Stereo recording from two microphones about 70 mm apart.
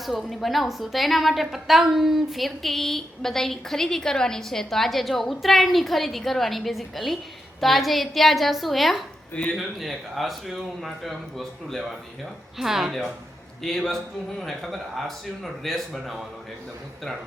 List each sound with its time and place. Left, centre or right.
0.0 s a woman's voice: centre
9.3 s speech: centre
9.6 s a woman's voice: centre